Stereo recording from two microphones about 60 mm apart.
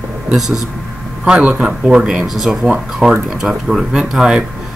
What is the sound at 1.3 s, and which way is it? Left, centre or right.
Speech, centre.